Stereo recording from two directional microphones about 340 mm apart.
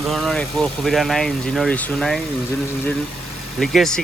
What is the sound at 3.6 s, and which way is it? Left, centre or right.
Speech, centre.